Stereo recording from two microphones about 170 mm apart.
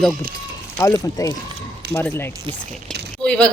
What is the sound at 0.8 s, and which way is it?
A woman's voice, 15° left (ahead or behind).